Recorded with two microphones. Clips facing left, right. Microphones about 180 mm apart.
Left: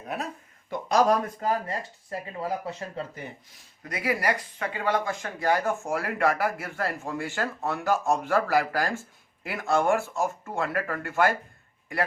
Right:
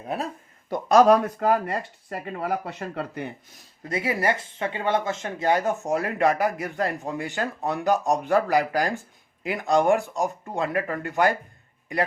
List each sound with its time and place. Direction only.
0.7 s speech: 55° right (ahead or behind)
3.8 s speech: 25° right (ahead or behind)